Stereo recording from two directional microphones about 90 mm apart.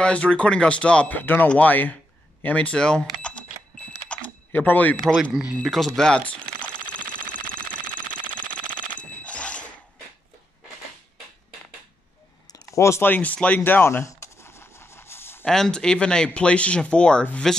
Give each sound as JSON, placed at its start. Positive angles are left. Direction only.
{"t": 0.0, "sound": "speech", "side_deg": 10}
{"t": 4.1, "sound": "typing", "side_deg": 15}
{"t": 5.3, "sound": "speech", "side_deg": -15}
{"t": 5.6, "sound": "speech", "side_deg": 0}
{"t": 6.4, "sound": "a sound", "side_deg": 55}
{"t": 8.7, "sound": "a sound", "side_deg": 15}
{"t": 12.7, "sound": "speech", "side_deg": 35}
{"t": 13.0, "sound": "speech", "side_deg": 20}
{"t": 13.7, "sound": "a sound", "side_deg": 25}
{"t": 15.4, "sound": "speech", "side_deg": 5}